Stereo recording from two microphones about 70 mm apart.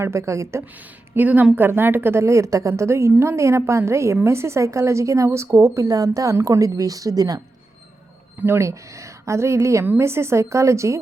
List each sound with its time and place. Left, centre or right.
0.0 s a woman's voice: right
1.1 s a woman's voice: right
8.4 s a woman's voice: right